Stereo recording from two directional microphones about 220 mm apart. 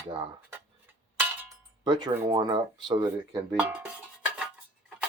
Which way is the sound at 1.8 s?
20° right (ahead or behind).